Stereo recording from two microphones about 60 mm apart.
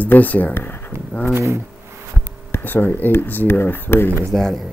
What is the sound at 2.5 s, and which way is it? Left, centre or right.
Speech, left.